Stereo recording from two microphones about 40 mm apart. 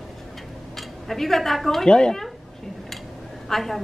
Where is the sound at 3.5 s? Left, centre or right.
Centre.